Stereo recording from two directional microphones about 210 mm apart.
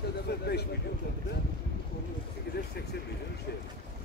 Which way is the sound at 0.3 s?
50° left (ahead or behind).